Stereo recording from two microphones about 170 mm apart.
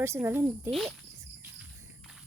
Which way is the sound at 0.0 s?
15° right (ahead or behind).